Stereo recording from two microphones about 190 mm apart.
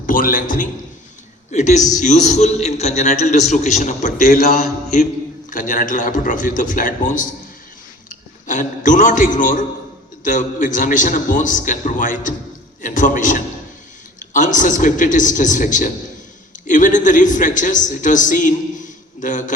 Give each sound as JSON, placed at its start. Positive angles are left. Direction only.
{"t": 0.0, "sound": "a man's voice", "side_deg": 45}
{"t": 4.2, "sound": "a man's voice", "side_deg": 55}
{"t": 4.6, "sound": "mantra", "side_deg": 40}
{"t": 5.5, "sound": "a man's voice", "side_deg": 45}